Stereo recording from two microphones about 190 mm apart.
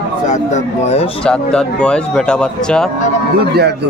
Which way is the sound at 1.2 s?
5° left (ahead or behind).